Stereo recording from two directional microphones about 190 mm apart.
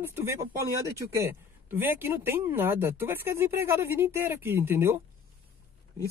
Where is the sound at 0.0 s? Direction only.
15° right (ahead or behind).